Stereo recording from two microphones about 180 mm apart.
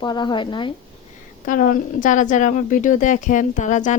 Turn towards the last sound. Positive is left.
turn(degrees=45)  # may be behind; listen again after turning